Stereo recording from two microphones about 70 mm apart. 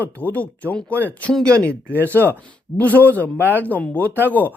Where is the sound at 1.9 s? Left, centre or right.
Right.